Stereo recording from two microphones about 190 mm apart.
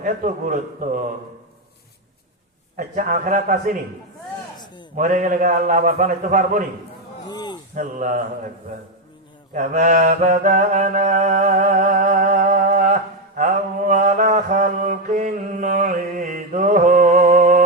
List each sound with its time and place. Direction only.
0.0 s a man's voice: 40° right (ahead or behind)
2.7 s a man's voice: 45° right (ahead or behind)
4.5 s a sound: 20° left (ahead or behind)
4.9 s a man's voice: 40° right (ahead or behind)
7.3 s a sound: 20° left (ahead or behind)
7.8 s a man's voice: 40° right (ahead or behind)
9.5 s mantra: 40° right (ahead or behind)